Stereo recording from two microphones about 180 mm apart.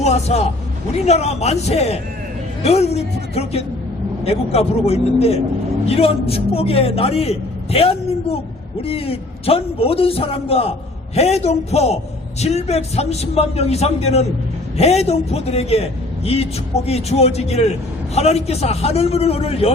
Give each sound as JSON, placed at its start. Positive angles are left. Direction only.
{"t": 0.0, "sound": "a man's voice", "side_deg": 35}